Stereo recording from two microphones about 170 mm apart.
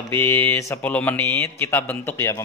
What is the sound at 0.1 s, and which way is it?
Speech, 15° left (ahead or behind).